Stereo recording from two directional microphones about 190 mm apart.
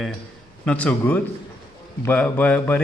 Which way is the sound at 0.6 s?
5° left (ahead or behind).